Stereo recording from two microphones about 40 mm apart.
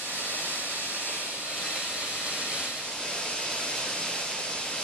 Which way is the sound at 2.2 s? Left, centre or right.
Right.